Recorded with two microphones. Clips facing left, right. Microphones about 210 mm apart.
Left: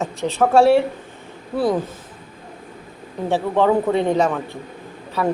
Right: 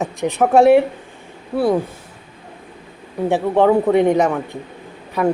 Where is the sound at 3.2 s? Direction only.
15° right (ahead or behind).